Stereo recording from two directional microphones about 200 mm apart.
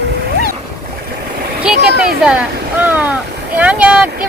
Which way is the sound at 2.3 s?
10° right (ahead or behind).